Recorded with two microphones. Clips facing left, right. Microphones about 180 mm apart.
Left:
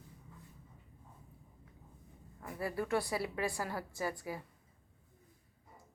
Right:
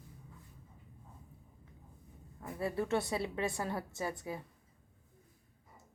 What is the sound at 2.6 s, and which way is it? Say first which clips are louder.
A woman's voice: right 1 dB; 25° right (ahead or behind).